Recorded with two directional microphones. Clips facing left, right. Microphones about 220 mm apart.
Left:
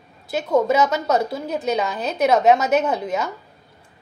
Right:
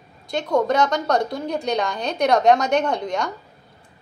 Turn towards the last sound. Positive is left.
turn(degrees=5)  # may be behind; listen again after turning